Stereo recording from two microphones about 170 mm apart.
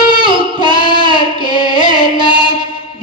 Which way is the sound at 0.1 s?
30° right (ahead or behind).